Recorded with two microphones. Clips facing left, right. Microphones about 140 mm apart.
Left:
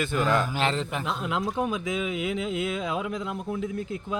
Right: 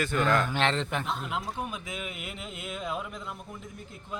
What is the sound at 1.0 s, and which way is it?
Speech, 90° left.